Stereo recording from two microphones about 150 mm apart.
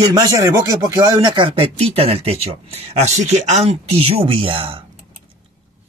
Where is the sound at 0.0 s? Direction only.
20° right (ahead or behind).